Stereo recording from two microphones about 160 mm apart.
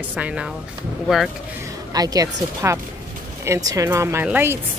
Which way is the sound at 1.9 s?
25° right (ahead or behind).